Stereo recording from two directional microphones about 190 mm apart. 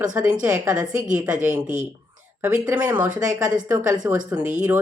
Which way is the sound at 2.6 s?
10° right (ahead or behind).